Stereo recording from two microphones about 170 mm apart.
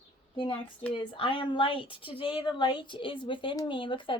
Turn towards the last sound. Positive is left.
turn(degrees=30)  # may be behind; listen again after turning